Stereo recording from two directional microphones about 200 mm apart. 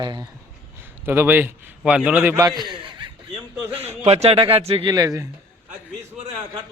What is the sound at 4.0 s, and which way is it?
Speech, 30° right (ahead or behind).